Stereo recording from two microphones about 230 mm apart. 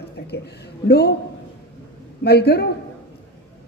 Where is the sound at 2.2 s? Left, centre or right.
Left.